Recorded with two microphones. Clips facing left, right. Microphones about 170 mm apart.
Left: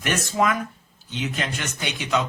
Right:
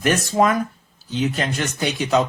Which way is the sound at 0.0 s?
40° right (ahead or behind).